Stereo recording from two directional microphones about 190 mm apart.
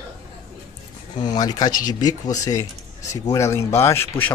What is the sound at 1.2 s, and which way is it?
Speech, 20° left (ahead or behind).